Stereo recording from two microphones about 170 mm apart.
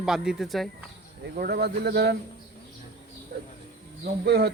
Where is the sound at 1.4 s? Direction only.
70° right (ahead or behind).